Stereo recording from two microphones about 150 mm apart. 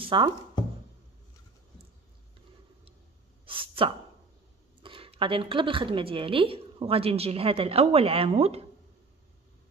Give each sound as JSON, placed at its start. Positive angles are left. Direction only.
{"t": 0.0, "sound": "speech", "side_deg": -35}
{"t": 3.4, "sound": "a sound", "side_deg": -35}
{"t": 4.8, "sound": "a woman's voice", "side_deg": -35}